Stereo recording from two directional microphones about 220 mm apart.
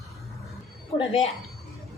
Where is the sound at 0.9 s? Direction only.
25° left (ahead or behind).